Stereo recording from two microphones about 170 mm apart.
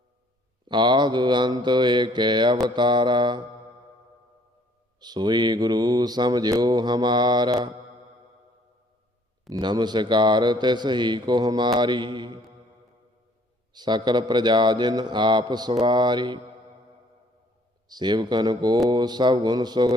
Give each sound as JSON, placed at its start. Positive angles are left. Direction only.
{"t": 0.7, "sound": "a man's voice", "side_deg": -25}
{"t": 4.9, "sound": "a man's voice", "side_deg": -25}
{"t": 9.5, "sound": "a man's voice", "side_deg": -25}
{"t": 13.7, "sound": "a man's voice", "side_deg": -25}
{"t": 17.8, "sound": "a man's voice", "side_deg": -25}